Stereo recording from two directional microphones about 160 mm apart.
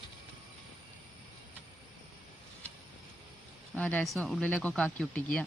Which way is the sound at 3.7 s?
10° left (ahead or behind).